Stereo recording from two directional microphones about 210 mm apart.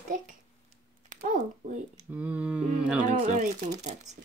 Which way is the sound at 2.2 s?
5° right (ahead or behind).